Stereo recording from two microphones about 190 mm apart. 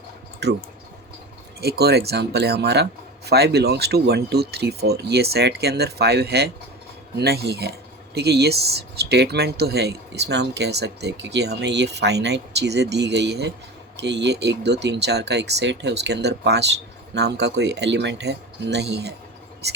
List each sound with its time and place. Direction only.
0.4 s speech: 65° right (ahead or behind)
1.6 s speech: 55° right (ahead or behind)